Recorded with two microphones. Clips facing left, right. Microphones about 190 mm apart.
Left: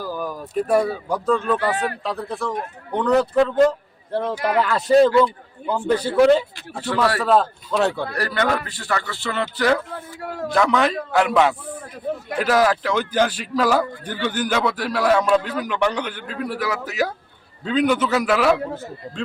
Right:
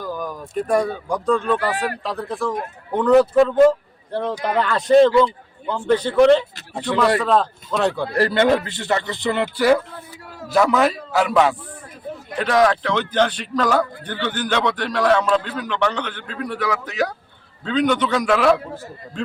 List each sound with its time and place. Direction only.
0.0 s speech: 5° left (ahead or behind)
8.1 s a man's voice: 25° right (ahead or behind)
10.2 s a sound: 60° left (ahead or behind)
10.5 s a man's voice: 5° right (ahead or behind)